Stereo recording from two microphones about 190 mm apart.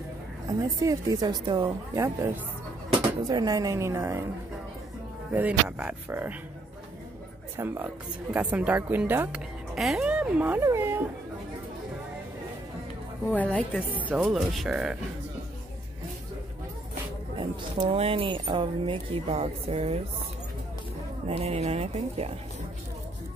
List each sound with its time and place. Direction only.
0.5 s speech: 20° right (ahead or behind)
5.3 s speech: 10° right (ahead or behind)
7.5 s speech: 10° right (ahead or behind)
13.3 s a woman's voice: 5° left (ahead or behind)
13.9 s speech: 10° right (ahead or behind)
17.4 s speech: 30° right (ahead or behind)
21.3 s speech: 35° right (ahead or behind)